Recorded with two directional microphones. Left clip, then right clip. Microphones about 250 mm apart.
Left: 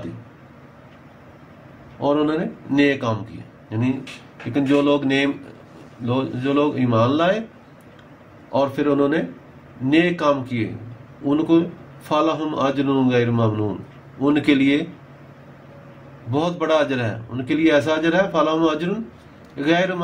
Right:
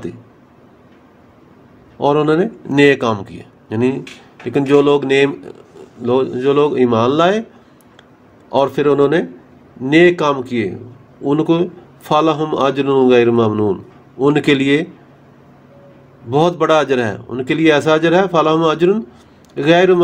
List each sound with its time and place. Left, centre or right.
2.0 s a man's voice: right
8.5 s a man's voice: right
16.3 s a man's voice: right